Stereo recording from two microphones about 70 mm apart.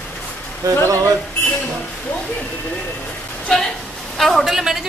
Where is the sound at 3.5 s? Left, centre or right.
Centre.